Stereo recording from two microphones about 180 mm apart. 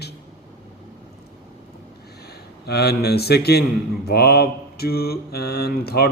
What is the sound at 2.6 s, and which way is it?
Mantra, 65° left (ahead or behind).